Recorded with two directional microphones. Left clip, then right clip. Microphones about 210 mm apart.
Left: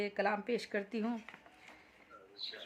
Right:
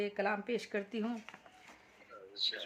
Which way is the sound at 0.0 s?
10° left (ahead or behind).